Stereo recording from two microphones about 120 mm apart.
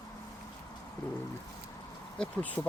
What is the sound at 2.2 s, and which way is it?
Speech, 10° left (ahead or behind).